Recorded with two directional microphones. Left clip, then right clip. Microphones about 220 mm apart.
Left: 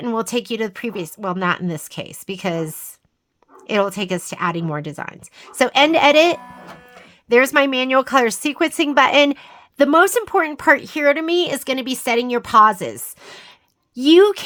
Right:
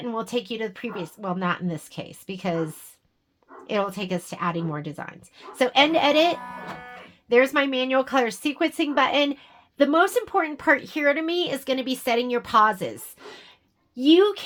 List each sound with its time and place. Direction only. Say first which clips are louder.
0.0 s speech: left 6 dB; 40° left (ahead or behind)
3.7 s speech: left 7 dB; 35° left (ahead or behind)